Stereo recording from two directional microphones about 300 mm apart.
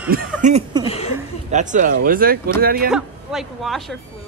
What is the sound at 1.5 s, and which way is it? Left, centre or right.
Speech, right.